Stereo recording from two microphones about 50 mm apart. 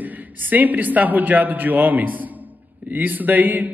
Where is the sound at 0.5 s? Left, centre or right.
Right.